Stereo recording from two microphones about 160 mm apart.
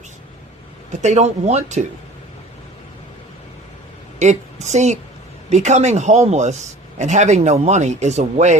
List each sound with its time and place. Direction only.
1.0 s speech: 45° right (ahead or behind)
4.2 s speech: 45° right (ahead or behind)